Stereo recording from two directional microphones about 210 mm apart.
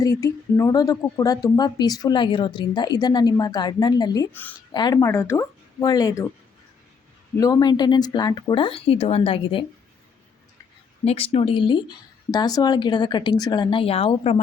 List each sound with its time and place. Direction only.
0.0 s a woman's voice: 15° left (ahead or behind)
4.7 s speech: 20° left (ahead or behind)
7.3 s speech: 15° left (ahead or behind)
11.0 s speech: 30° left (ahead or behind)